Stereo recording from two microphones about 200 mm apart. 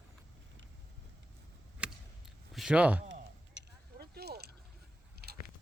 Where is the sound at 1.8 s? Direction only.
5° right (ahead or behind).